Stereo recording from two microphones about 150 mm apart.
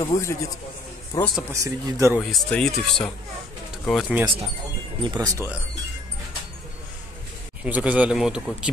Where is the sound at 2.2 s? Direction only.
5° left (ahead or behind).